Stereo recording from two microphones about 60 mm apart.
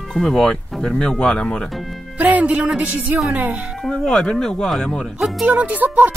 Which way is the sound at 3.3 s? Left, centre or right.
Right.